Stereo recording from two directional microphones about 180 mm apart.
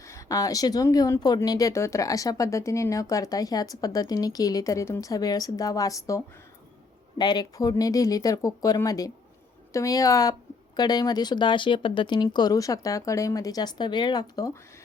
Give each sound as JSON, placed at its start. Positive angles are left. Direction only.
{"t": 0.0, "sound": "a woman's voice", "side_deg": 15}